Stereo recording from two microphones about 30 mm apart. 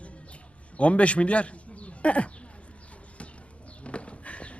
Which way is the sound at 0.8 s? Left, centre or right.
Left.